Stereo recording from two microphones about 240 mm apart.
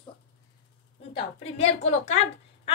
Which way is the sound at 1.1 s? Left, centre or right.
Left.